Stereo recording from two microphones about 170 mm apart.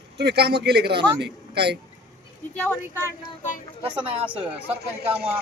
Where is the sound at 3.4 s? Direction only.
50° left (ahead or behind).